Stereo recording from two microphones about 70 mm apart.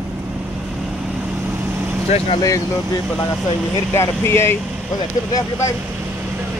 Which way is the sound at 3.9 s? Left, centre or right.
Left.